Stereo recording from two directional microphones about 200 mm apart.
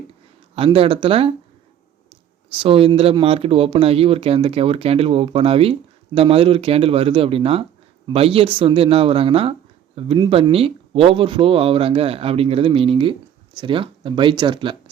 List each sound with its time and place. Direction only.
0.5 s speech: 30° right (ahead or behind)
2.5 s speech: 25° right (ahead or behind)